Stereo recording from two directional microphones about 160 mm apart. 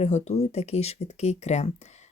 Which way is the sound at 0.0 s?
45° left (ahead or behind).